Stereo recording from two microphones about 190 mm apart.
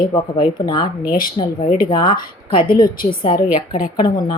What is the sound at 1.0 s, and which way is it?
Speech, 50° left (ahead or behind).